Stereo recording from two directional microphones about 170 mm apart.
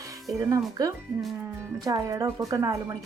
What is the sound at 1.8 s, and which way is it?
Speech, 20° right (ahead or behind).